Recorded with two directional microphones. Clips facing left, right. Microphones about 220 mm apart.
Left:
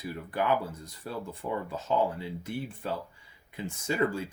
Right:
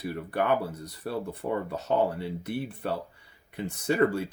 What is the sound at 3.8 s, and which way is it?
Speech, 60° right (ahead or behind).